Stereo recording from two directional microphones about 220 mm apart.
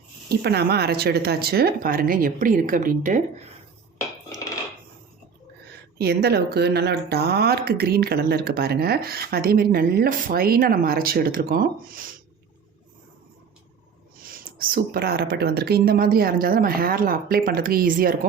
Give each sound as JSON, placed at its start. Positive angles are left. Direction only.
{"t": 0.3, "sound": "speech", "side_deg": -45}
{"t": 6.0, "sound": "speech", "side_deg": -45}
{"t": 14.6, "sound": "speech", "side_deg": -45}